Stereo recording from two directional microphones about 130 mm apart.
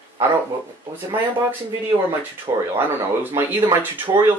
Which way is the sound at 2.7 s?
20° right (ahead or behind).